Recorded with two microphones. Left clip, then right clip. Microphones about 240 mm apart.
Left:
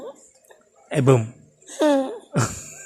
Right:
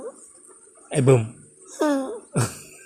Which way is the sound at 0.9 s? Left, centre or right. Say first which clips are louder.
Even; centre.